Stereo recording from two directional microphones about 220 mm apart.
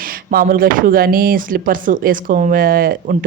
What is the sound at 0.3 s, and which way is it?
Speech, 40° right (ahead or behind).